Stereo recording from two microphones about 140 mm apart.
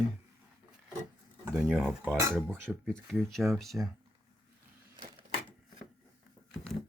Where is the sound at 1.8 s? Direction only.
5° right (ahead or behind).